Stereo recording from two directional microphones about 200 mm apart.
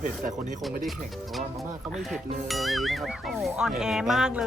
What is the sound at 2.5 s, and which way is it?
Speech, centre (ahead or behind).